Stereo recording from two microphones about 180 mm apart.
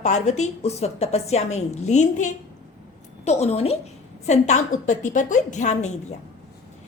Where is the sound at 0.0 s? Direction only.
40° left (ahead or behind).